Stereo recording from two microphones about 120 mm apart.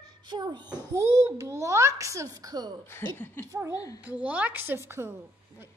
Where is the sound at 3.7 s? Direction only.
30° left (ahead or behind).